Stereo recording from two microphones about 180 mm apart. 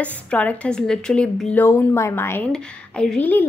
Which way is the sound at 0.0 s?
10° left (ahead or behind).